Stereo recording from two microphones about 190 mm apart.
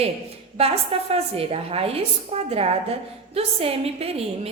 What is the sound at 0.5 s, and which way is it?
A woman's voice, 30° right (ahead or behind).